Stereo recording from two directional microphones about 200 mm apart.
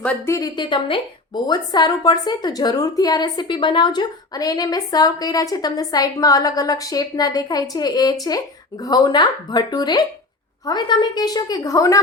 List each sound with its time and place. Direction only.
0.0 s a woman's voice: 5° left (ahead or behind)
0.3 s a woman's voice: 20° left (ahead or behind)